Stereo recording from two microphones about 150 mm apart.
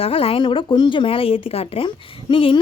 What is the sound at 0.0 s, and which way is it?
Speech, 40° left (ahead or behind).